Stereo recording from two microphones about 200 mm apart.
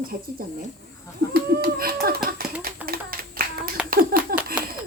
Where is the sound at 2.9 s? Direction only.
45° right (ahead or behind).